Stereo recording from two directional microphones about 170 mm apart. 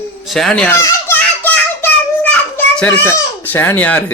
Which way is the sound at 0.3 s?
Centre (ahead or behind).